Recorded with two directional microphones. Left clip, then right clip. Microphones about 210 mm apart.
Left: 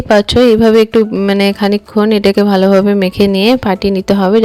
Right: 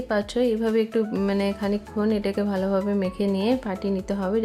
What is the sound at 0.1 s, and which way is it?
Speech, 40° left (ahead or behind).